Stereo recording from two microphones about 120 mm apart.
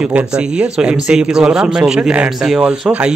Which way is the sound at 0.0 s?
10° right (ahead or behind).